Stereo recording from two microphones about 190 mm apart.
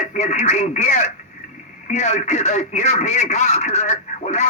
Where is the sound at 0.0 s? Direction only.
40° left (ahead or behind).